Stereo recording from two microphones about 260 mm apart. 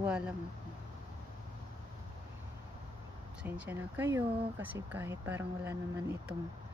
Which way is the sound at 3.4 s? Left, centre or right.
Centre.